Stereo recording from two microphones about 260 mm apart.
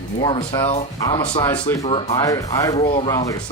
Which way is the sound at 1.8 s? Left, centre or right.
Left.